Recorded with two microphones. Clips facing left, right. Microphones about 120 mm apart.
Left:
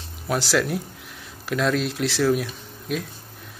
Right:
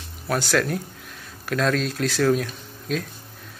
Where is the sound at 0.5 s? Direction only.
15° left (ahead or behind).